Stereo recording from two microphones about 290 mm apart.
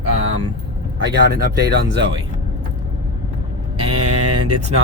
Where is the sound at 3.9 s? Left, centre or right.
Right.